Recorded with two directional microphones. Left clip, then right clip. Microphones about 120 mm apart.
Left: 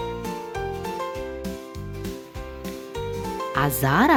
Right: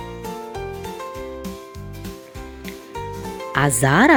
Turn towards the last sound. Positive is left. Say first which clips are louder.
# right 4 dB
turn(degrees=-20)  # may be behind; listen again after turning